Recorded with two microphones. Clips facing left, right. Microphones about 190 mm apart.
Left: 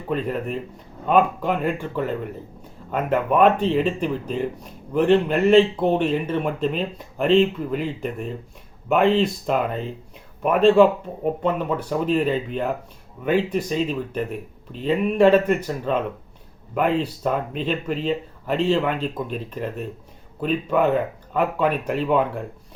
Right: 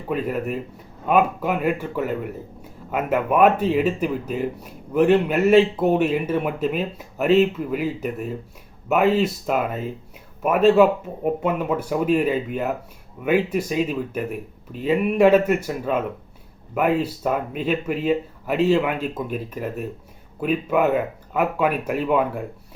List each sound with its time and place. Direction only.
0.1 s speech: 5° right (ahead or behind)